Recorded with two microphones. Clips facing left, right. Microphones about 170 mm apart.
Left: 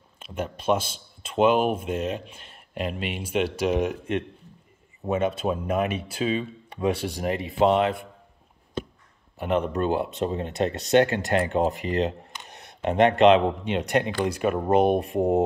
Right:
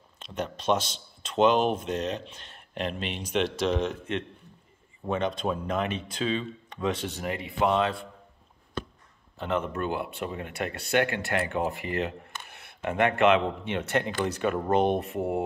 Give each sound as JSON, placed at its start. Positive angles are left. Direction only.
{"t": 0.2, "sound": "speech", "side_deg": 10}
{"t": 5.1, "sound": "speech", "side_deg": 5}
{"t": 7.2, "sound": "speech", "side_deg": 20}
{"t": 9.4, "sound": "speech", "side_deg": 15}